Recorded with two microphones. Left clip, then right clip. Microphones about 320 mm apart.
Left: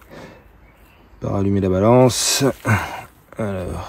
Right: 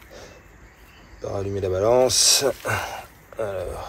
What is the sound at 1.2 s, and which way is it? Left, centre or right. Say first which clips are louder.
Speech: left 5 dB; left.